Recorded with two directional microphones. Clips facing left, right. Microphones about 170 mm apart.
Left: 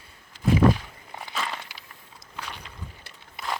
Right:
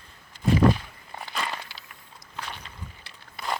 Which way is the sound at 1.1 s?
5° left (ahead or behind).